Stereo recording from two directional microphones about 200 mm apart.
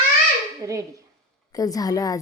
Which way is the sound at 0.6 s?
15° right (ahead or behind).